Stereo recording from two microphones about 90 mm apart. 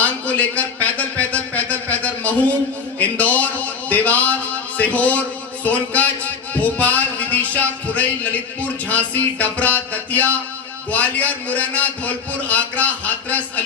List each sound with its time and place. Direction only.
0.0 s a sound: 15° left (ahead or behind)
3.0 s music: 15° left (ahead or behind)
4.8 s a man's voice: 15° left (ahead or behind)